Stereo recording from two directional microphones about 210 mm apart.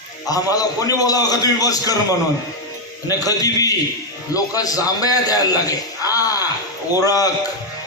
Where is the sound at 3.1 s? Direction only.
15° left (ahead or behind).